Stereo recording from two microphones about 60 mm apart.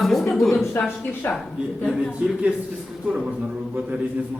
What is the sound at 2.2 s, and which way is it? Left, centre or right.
Speech, centre.